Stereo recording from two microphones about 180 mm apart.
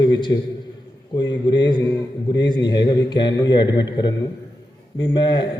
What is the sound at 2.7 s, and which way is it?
A man's voice, 25° left (ahead or behind).